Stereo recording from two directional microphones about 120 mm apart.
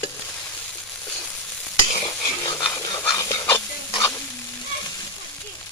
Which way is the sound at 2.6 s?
35° left (ahead or behind).